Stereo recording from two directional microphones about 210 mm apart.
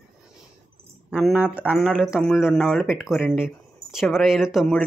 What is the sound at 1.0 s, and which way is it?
Speech, 5° right (ahead or behind).